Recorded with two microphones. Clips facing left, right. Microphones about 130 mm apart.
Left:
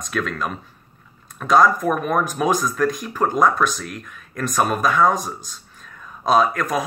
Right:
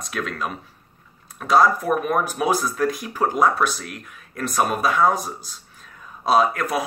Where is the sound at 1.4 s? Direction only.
35° right (ahead or behind).